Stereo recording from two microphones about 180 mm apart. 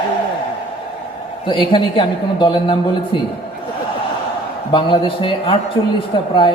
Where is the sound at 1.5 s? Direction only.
25° left (ahead or behind).